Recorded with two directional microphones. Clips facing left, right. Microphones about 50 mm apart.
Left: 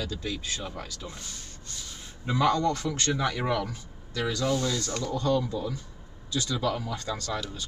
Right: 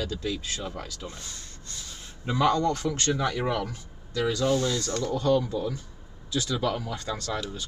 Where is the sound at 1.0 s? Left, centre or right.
Centre.